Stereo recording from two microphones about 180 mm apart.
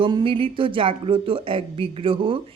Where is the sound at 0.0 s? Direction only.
30° right (ahead or behind).